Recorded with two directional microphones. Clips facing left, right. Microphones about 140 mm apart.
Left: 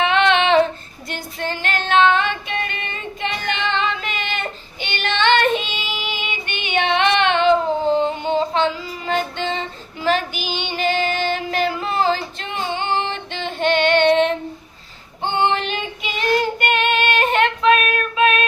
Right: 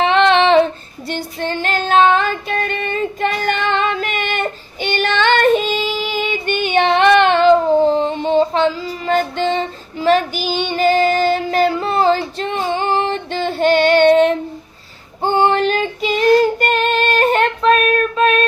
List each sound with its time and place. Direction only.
0.0 s child singing: 35° right (ahead or behind)
7.9 s music: 30° right (ahead or behind)
15.2 s child singing: 40° right (ahead or behind)